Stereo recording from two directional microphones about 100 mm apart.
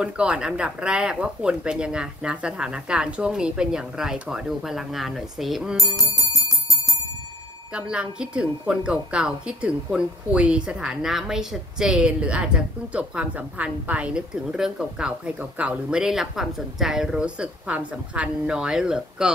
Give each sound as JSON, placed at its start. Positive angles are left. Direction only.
{"t": 0.0, "sound": "a woman's voice", "side_deg": -10}
{"t": 5.8, "sound": "music", "side_deg": 40}
{"t": 7.7, "sound": "a woman's voice", "side_deg": -10}